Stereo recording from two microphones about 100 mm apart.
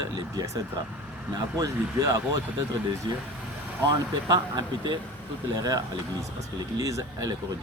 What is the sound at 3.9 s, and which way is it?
Speech, 45° right (ahead or behind).